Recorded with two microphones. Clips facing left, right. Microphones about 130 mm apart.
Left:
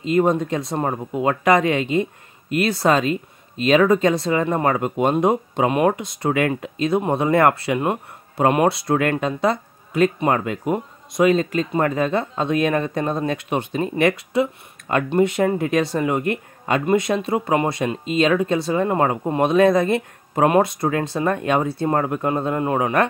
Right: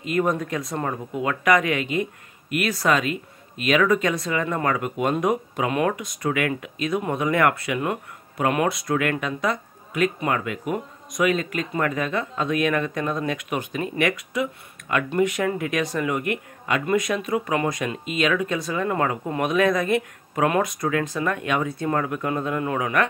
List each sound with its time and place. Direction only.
0.0 s speech: 25° left (ahead or behind)